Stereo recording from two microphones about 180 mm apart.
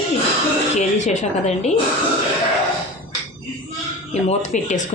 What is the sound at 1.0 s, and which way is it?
Speech, 40° left (ahead or behind).